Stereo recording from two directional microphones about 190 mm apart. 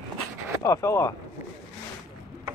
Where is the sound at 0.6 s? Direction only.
15° left (ahead or behind).